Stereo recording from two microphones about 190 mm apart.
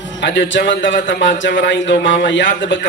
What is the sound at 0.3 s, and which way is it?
Mantra, 70° left (ahead or behind).